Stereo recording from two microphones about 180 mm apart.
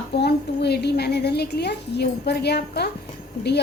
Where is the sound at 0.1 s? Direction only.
65° left (ahead or behind).